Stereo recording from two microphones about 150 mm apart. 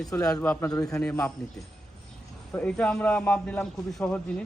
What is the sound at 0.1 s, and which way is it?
A man's voice, 15° left (ahead or behind).